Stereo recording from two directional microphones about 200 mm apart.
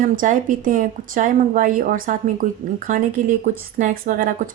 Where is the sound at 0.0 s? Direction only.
40° right (ahead or behind).